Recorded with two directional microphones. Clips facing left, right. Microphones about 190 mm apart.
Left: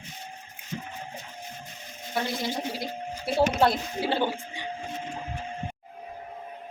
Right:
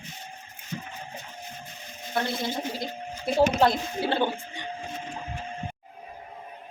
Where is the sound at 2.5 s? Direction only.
10° left (ahead or behind).